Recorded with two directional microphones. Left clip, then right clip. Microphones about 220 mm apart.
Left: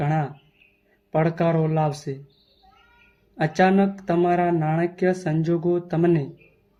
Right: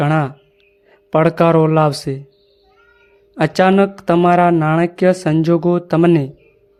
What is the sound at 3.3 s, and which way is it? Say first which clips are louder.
Speech: right 7 dB; 50° right (ahead or behind).